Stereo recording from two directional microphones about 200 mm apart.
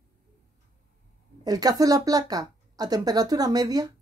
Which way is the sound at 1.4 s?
20° right (ahead or behind).